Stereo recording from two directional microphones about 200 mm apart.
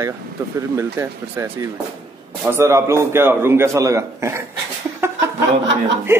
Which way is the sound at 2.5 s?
15° right (ahead or behind).